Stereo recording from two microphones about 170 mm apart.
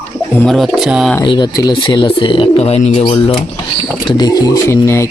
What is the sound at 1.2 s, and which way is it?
Speech, 25° left (ahead or behind).